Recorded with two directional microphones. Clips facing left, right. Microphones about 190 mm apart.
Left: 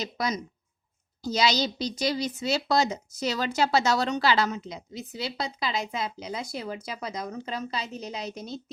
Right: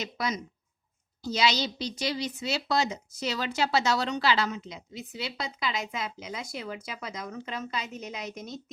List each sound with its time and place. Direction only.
0.0 s a woman's voice: 40° left (ahead or behind)